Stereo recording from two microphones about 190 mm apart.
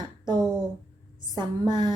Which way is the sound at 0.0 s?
20° right (ahead or behind).